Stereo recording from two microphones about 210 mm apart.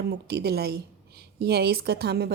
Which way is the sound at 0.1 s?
50° right (ahead or behind).